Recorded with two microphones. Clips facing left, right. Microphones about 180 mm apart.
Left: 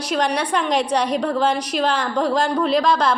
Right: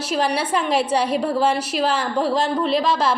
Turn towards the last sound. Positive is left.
turn(degrees=-5)  # may be behind; listen again after turning